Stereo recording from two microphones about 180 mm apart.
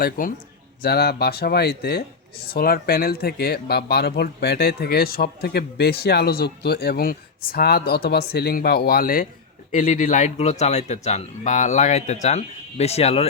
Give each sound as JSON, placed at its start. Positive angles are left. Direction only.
{"t": 0.0, "sound": "speech", "side_deg": 50}
{"t": 0.8, "sound": "speech", "side_deg": 60}